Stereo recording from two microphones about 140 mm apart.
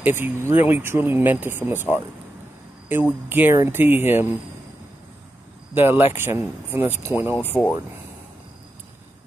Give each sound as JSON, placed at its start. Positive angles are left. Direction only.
{"t": 0.0, "sound": "speech", "side_deg": -15}
{"t": 2.9, "sound": "speech", "side_deg": -15}
{"t": 5.8, "sound": "speech", "side_deg": -15}